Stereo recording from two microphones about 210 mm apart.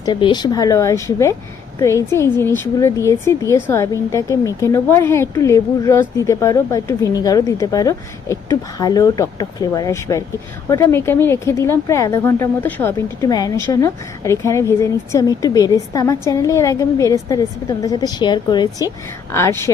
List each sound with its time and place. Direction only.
0.0 s speech: 20° left (ahead or behind)